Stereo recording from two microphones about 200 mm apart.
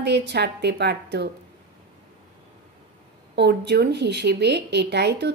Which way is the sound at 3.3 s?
55° right (ahead or behind).